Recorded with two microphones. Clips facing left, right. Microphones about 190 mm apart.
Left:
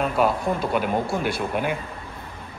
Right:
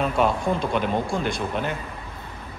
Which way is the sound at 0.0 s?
Centre (ahead or behind).